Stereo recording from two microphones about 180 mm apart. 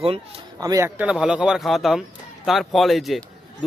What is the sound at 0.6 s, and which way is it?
Speech, 20° right (ahead or behind).